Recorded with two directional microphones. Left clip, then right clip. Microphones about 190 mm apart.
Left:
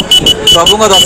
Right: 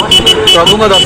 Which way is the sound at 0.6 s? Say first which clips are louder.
Even; 30° left (ahead or behind).